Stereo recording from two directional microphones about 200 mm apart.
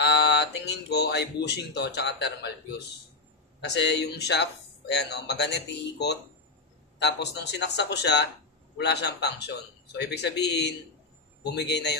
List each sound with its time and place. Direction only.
0.0 s speech: 55° left (ahead or behind)
3.6 s speech: 60° left (ahead or behind)